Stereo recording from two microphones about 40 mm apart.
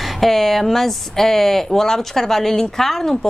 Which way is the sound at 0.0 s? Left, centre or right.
Centre.